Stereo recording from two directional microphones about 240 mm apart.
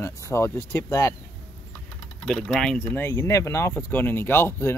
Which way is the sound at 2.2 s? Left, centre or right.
Centre.